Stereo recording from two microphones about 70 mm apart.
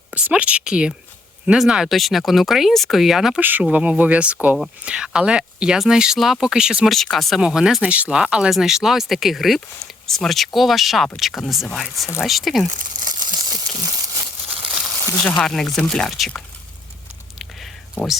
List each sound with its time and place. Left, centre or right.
0.1 s speech: right; by 3.4 s centre
3.6 s speech: centre
6.9 s speech: centre
7.4 s speech: centre
13.0 s crumpling: right
15.2 s speech: centre